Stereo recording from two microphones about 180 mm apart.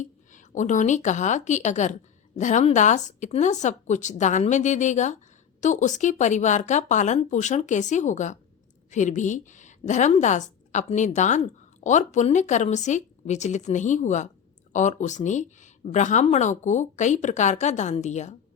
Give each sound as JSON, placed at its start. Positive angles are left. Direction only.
{"t": 0.0, "sound": "a woman's voice", "side_deg": 45}